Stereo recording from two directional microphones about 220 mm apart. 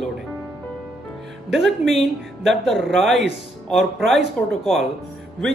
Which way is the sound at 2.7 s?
Centre (ahead or behind).